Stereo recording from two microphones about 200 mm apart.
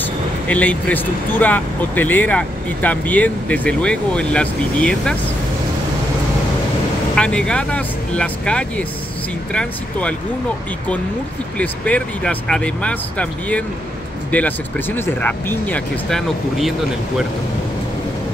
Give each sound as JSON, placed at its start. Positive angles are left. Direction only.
{"t": 0.0, "sound": "speech", "side_deg": 5}
{"t": 7.2, "sound": "speech", "side_deg": 5}
{"t": 11.5, "sound": "speech", "side_deg": 5}